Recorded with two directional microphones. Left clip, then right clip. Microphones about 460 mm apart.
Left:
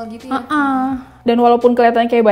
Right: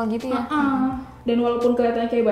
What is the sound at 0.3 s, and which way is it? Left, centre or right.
A woman's voice, left.